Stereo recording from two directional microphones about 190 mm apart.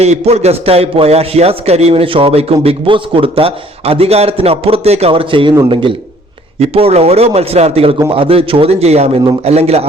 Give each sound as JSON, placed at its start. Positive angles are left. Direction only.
{"t": 0.0, "sound": "a man's voice", "side_deg": -35}